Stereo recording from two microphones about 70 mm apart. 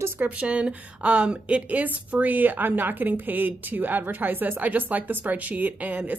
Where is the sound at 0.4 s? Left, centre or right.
Centre.